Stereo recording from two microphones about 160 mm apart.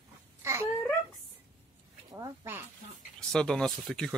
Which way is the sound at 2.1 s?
20° right (ahead or behind).